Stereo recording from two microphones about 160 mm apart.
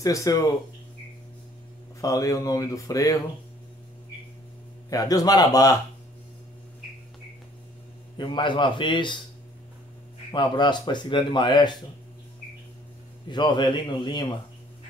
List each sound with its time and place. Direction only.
0.0 s speech: 20° left (ahead or behind)
2.0 s speech: 20° left (ahead or behind)
4.8 s speech: 20° left (ahead or behind)
8.2 s speech: 30° left (ahead or behind)
10.3 s speech: 30° left (ahead or behind)
13.3 s speech: 30° left (ahead or behind)